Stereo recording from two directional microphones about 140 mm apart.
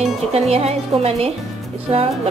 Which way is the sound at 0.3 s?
45° right (ahead or behind).